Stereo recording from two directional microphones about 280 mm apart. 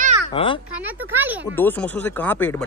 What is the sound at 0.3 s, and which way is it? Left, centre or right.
Speech, centre.